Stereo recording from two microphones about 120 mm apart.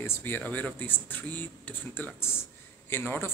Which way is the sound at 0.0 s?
20° left (ahead or behind).